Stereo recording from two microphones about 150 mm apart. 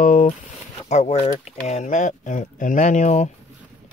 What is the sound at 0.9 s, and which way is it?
Speech, 50° left (ahead or behind).